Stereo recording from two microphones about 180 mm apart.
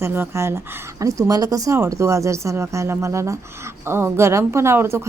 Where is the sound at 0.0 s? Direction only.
15° right (ahead or behind).